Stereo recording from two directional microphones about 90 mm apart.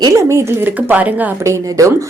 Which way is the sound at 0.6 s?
20° right (ahead or behind).